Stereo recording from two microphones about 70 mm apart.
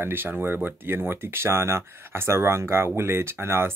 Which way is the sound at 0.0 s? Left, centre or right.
Right.